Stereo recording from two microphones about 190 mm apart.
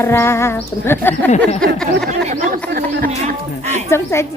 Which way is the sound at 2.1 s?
35° right (ahead or behind).